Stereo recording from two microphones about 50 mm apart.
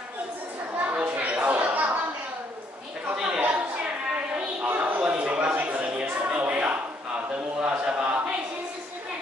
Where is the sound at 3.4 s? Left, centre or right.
Right.